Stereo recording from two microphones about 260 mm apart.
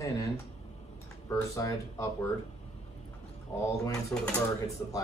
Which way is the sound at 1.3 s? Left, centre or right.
Centre.